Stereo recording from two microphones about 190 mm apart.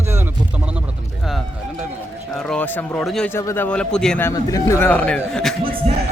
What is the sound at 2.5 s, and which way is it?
A man's voice, 10° left (ahead or behind).